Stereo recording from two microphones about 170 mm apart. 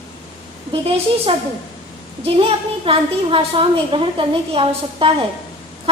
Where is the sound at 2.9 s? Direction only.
30° right (ahead or behind).